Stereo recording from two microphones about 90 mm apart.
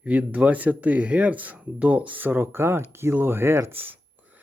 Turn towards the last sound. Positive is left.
turn(degrees=-20)  # may be behind; listen again after turning